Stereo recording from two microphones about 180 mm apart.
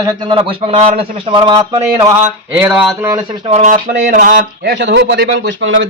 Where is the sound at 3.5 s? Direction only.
35° right (ahead or behind).